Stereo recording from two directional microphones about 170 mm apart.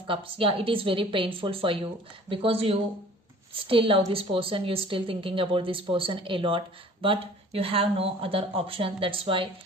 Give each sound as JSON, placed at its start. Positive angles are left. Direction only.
{"t": 0.1, "sound": "a woman's voice", "side_deg": -30}